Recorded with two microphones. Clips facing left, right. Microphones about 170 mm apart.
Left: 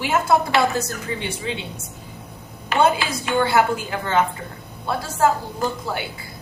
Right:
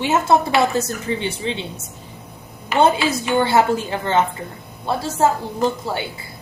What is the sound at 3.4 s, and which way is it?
A woman's voice, 25° right (ahead or behind).